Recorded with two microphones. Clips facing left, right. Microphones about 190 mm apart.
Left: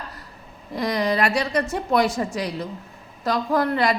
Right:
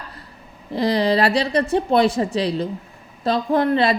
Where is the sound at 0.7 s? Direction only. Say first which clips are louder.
Right 4 dB; 30° right (ahead or behind).